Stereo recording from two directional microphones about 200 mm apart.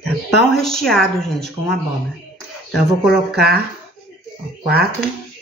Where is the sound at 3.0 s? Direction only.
55° right (ahead or behind).